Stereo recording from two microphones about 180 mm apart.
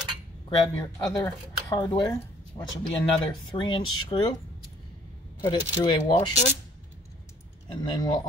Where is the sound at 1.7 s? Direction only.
20° left (ahead or behind).